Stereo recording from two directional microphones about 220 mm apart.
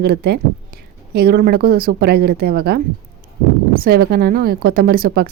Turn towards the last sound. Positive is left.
turn(degrees=-45)  # may be behind; listen again after turning